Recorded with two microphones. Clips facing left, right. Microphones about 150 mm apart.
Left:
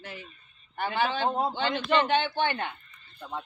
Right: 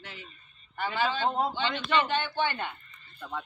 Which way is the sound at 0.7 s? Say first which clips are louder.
Left 1 dB; 55° left (ahead or behind).